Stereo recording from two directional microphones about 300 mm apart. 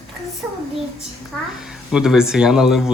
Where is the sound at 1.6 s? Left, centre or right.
Centre.